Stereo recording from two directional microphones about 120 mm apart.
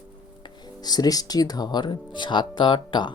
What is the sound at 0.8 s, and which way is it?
Speech, 35° left (ahead or behind).